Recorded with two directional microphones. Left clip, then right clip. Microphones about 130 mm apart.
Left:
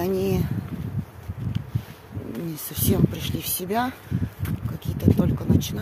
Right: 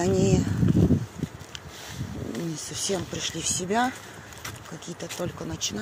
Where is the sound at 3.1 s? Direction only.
25° left (ahead or behind).